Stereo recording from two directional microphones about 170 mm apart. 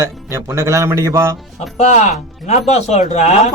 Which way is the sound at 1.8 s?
45° left (ahead or behind).